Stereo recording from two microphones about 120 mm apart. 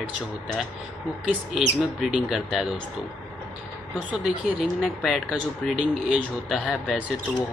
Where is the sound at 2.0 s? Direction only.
5° right (ahead or behind).